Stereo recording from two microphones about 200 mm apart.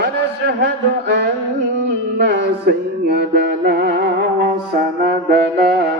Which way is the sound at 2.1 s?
60° right (ahead or behind).